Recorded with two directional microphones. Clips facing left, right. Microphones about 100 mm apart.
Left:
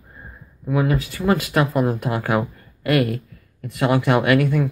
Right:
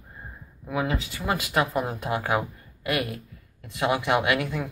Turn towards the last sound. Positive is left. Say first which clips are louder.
# left 7 dB
turn(degrees=-20)  # may be behind; listen again after turning